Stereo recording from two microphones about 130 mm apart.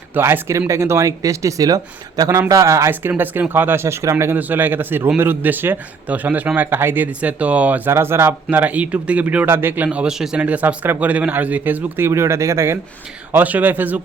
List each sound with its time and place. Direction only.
0.1 s speech: 15° right (ahead or behind)